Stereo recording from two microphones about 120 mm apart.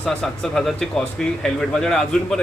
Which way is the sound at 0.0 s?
5° left (ahead or behind).